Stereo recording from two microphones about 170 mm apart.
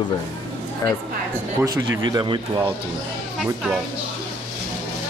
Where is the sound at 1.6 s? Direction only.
25° right (ahead or behind).